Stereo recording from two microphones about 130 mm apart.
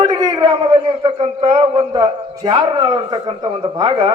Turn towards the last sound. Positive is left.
turn(degrees=-40)  # may be behind; listen again after turning